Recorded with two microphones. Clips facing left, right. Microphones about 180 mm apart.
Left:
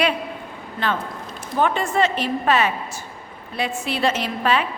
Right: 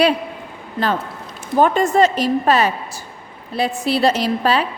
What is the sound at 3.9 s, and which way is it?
Speech, 35° right (ahead or behind).